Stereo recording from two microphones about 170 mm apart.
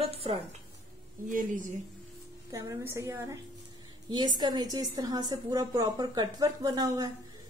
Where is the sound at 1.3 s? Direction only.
50° right (ahead or behind).